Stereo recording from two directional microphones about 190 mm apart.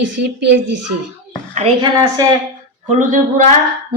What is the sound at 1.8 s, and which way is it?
Speech, 15° right (ahead or behind).